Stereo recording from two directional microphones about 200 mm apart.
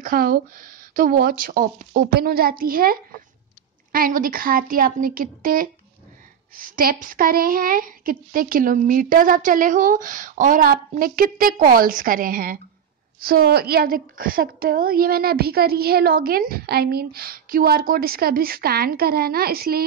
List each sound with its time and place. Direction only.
0.0 s a woman's voice: 45° right (ahead or behind)